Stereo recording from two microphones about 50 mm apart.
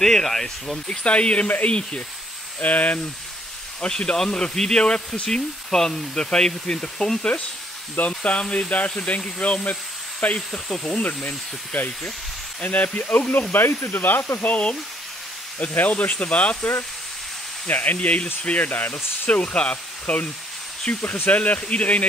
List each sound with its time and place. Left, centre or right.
0.0 s speech: centre
0.8 s speech: left
3.8 s speech: centre
10.5 s speech: centre
11.2 s speech: left
14.4 s speech: left
17.6 s speech: left